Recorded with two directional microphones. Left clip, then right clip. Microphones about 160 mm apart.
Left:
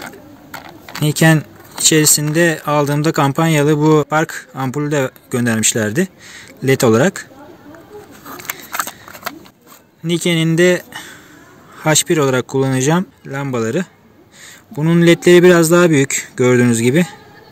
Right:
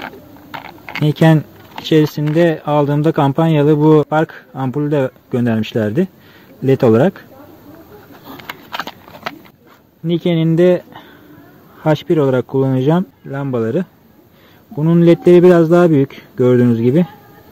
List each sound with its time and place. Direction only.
0.8 s speech: 25° right (ahead or behind)
10.0 s speech: 30° right (ahead or behind)